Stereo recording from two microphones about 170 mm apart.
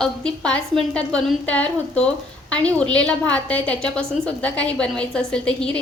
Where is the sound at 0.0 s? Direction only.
5° left (ahead or behind).